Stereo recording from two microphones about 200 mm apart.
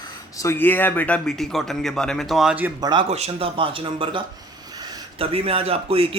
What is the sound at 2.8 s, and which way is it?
Speech, 25° right (ahead or behind).